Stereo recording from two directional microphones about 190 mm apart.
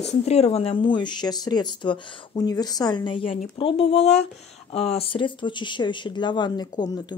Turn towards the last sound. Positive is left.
turn(degrees=20)  # may be behind; listen again after turning